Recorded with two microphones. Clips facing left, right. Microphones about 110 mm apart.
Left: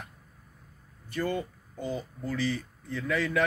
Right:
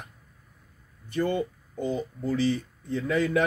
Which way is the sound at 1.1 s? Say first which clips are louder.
Right 4 dB; 25° right (ahead or behind).